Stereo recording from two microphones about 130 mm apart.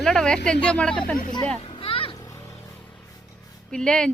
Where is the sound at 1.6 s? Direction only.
45° left (ahead or behind).